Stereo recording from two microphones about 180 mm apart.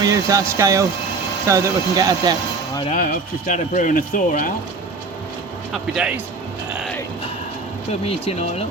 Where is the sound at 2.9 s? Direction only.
45° left (ahead or behind).